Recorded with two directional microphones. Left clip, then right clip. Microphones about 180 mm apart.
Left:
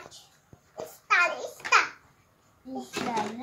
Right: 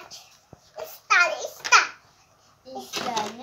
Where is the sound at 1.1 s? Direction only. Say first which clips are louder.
Right 4 dB; 5° left (ahead or behind).